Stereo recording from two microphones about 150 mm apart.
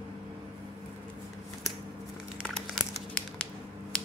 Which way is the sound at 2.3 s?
Centre (ahead or behind).